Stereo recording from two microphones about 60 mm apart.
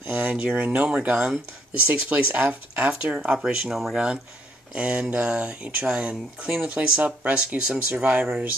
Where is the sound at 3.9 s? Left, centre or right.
Centre.